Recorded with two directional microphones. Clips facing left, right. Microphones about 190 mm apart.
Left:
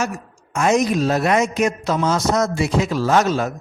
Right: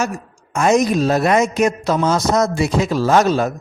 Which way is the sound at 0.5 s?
40° right (ahead or behind).